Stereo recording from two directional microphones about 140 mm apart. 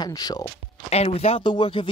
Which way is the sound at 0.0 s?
30° left (ahead or behind).